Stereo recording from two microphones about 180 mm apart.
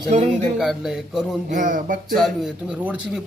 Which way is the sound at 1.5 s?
45° right (ahead or behind).